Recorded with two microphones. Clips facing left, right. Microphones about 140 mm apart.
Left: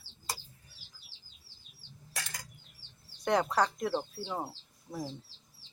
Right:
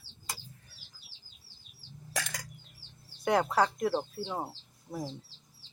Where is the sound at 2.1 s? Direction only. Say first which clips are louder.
Right 6 dB; 70° right (ahead or behind).